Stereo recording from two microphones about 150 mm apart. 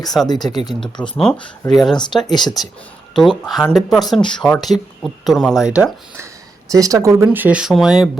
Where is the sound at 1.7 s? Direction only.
Centre (ahead or behind).